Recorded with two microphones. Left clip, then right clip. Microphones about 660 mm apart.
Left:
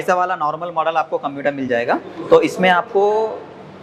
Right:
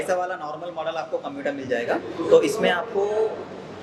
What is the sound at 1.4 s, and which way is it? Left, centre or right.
Speech, left.